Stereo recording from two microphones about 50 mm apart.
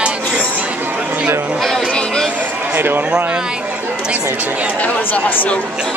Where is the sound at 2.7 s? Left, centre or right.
Right.